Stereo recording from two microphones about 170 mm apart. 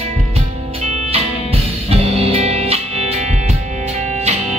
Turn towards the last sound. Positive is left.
turn(degrees=-35)  # may be behind; listen again after turning